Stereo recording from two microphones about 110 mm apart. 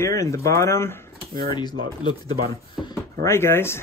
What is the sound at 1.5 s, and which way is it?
Speech, 40° left (ahead or behind).